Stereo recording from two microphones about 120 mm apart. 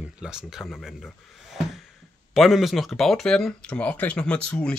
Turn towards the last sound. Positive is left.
turn(degrees=10)  # may be behind; listen again after turning